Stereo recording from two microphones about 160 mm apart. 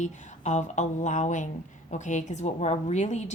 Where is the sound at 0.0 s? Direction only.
50° left (ahead or behind).